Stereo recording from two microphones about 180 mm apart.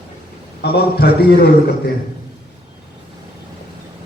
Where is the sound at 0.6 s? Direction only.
65° left (ahead or behind).